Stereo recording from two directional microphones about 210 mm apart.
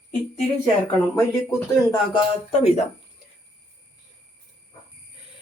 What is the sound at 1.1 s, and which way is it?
Speech, 10° left (ahead or behind).